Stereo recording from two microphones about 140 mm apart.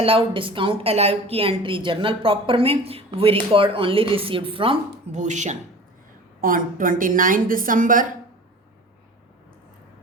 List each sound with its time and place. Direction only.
0.0 s a woman's voice: 40° right (ahead or behind)
5.1 s speech: 60° right (ahead or behind)
6.4 s a woman's voice: 80° right